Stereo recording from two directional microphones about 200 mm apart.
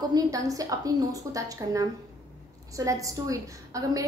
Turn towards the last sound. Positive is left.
turn(degrees=-15)  # may be behind; listen again after turning